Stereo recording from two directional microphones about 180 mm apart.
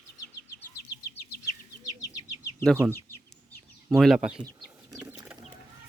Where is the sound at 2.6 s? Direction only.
5° left (ahead or behind).